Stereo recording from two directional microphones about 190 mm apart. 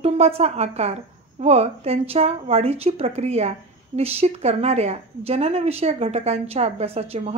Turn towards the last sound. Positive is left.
turn(degrees=-35)  # may be behind; listen again after turning